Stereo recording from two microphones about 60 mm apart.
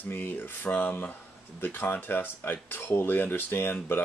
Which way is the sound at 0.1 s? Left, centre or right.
Left.